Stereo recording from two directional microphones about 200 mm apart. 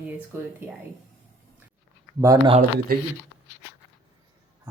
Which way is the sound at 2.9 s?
45° right (ahead or behind).